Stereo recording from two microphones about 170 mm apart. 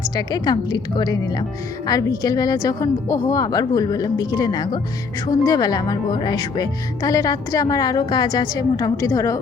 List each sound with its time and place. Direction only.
0.2 s speech: 25° left (ahead or behind)